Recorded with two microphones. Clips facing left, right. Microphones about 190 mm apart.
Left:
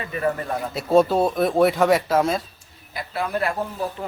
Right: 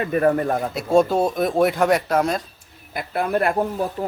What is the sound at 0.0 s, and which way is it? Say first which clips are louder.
Speech: right 6 dB; 50° right (ahead or behind).